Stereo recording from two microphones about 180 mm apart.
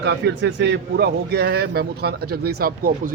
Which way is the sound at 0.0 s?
70° right (ahead or behind).